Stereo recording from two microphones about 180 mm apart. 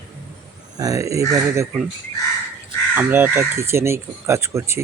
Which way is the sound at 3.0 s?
10° right (ahead or behind).